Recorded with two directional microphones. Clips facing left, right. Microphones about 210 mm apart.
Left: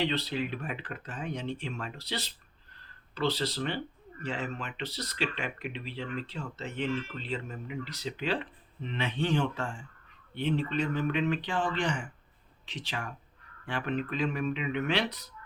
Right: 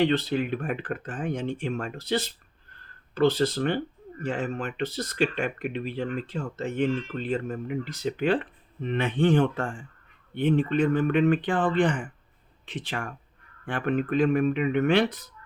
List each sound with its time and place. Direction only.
0.0 s speech: 50° right (ahead or behind)